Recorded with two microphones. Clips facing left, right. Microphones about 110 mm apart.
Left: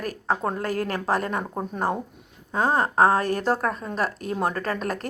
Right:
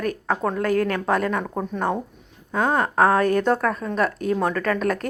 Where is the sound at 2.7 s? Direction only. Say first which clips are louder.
Right 1 dB; 30° left (ahead or behind).